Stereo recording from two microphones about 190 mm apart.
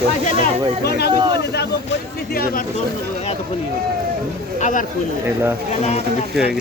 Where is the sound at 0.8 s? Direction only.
60° left (ahead or behind).